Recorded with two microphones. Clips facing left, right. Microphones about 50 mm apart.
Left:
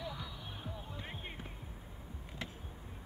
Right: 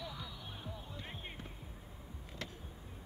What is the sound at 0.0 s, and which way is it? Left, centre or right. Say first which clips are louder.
Music: left 2 dB; centre.